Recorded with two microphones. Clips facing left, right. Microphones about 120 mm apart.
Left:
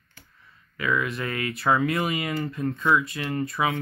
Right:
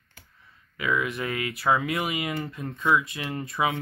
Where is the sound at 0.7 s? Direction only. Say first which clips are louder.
Left 1 dB; 15° right (ahead or behind).